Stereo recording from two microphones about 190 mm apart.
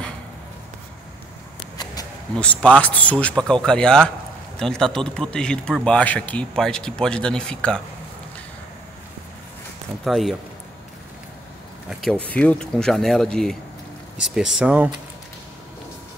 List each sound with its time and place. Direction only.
1.6 s a sound: 20° left (ahead or behind)
2.3 s a man's voice: 5° left (ahead or behind)
10.0 s a man's voice: centre (ahead or behind)
11.9 s a man's voice: centre (ahead or behind)